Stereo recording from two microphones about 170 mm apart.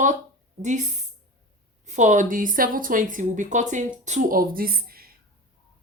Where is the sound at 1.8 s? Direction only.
45° right (ahead or behind).